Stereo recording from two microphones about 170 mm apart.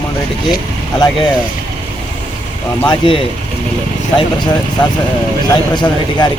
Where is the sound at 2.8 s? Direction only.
30° left (ahead or behind).